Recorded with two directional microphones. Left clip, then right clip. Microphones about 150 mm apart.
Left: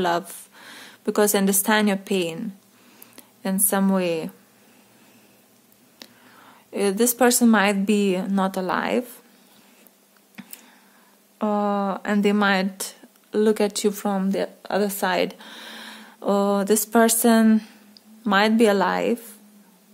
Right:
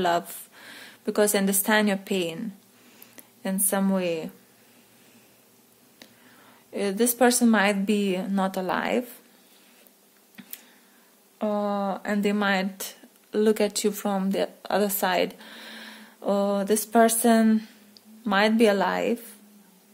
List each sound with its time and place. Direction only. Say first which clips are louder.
0.0 s speech: left 1 dB; 25° left (ahead or behind)
5.9 s speech: left 5 dB; 35° left (ahead or behind)
10.4 s clicking: left 4 dB; 40° left (ahead or behind)
11.3 s speech: left 3 dB; 35° left (ahead or behind)